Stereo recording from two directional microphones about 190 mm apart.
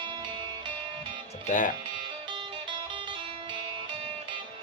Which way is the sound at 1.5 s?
45° left (ahead or behind).